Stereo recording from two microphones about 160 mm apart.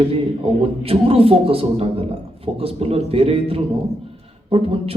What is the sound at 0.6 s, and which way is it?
A man's voice, 35° right (ahead or behind).